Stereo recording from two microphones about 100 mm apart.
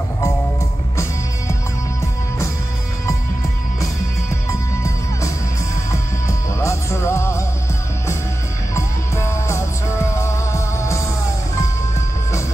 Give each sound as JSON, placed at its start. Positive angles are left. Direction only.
{"t": 4.5, "sound": "music", "side_deg": 30}
{"t": 8.7, "sound": "music", "side_deg": 30}